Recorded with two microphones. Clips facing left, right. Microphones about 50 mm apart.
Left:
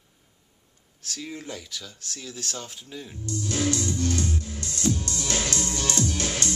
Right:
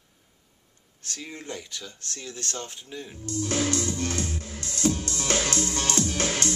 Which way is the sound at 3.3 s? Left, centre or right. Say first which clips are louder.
Even; right.